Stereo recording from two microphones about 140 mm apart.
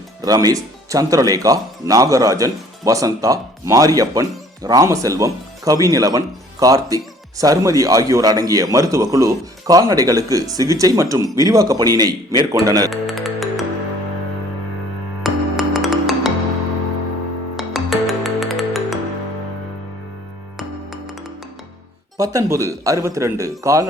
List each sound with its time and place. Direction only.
0.2 s speech: 25° right (ahead or behind)
12.9 s music: centre (ahead or behind)
15.2 s music: centre (ahead or behind)
17.6 s music: centre (ahead or behind)
20.6 s music: centre (ahead or behind)
22.2 s speech: 25° right (ahead or behind)